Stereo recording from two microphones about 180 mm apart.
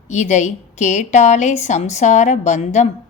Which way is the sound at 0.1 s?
40° left (ahead or behind).